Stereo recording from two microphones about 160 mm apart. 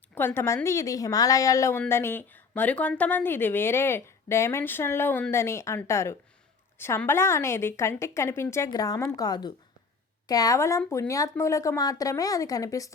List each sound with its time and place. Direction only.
0.1 s speech: 10° left (ahead or behind)